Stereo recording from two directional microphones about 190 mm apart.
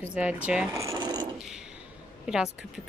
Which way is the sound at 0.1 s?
5° right (ahead or behind).